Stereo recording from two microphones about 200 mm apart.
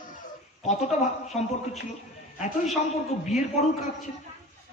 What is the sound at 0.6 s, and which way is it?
A man's voice, 35° left (ahead or behind).